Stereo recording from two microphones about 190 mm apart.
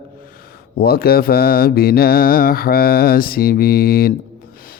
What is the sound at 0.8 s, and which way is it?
Speech, 55° left (ahead or behind).